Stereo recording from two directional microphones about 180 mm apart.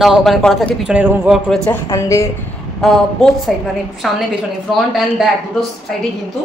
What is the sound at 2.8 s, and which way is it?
A man's voice, centre (ahead or behind).